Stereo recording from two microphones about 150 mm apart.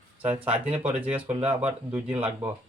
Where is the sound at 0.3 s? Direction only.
40° right (ahead or behind).